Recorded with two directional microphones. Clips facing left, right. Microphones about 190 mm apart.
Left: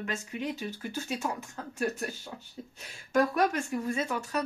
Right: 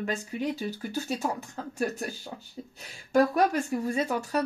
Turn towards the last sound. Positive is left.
turn(degrees=-35)  # may be behind; listen again after turning